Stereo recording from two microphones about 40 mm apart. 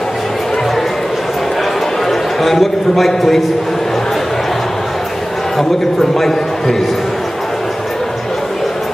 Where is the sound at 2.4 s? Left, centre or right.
Centre.